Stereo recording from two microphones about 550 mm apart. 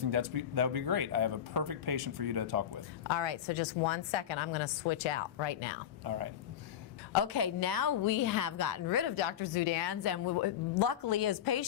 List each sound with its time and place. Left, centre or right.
0.0 s speech: right
3.1 s a woman's voice: left
6.1 s speech: right
7.1 s a woman's voice: left
9.1 s a woman's voice: left